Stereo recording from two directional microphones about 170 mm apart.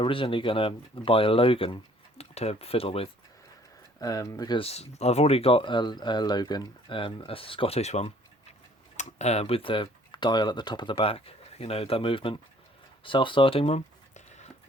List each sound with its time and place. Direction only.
0.0 s speech: 30° left (ahead or behind)
4.0 s speech: 20° left (ahead or behind)
13.1 s a sound: 30° left (ahead or behind)